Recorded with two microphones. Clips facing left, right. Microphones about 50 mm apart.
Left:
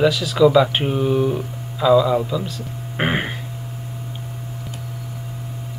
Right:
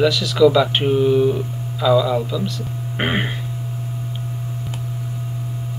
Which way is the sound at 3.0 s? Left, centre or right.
Centre.